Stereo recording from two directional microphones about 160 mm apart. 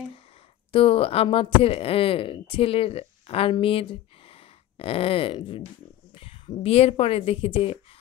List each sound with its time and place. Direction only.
0.7 s speech: 35° left (ahead or behind)
4.3 s a sound: 35° left (ahead or behind)
6.1 s a woman's voice: 35° left (ahead or behind)